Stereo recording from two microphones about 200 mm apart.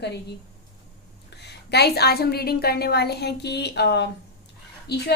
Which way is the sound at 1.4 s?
55° left (ahead or behind).